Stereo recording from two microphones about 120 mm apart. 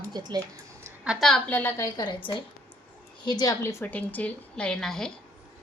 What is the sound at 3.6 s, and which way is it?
A woman's voice, 20° left (ahead or behind).